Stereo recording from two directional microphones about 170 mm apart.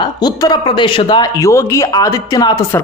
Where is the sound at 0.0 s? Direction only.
25° left (ahead or behind).